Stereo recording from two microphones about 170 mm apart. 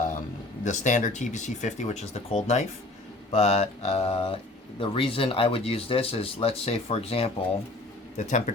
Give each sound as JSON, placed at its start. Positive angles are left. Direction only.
{"t": 0.6, "sound": "speech", "side_deg": 45}